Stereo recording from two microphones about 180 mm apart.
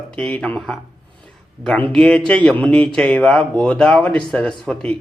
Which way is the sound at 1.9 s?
5° left (ahead or behind).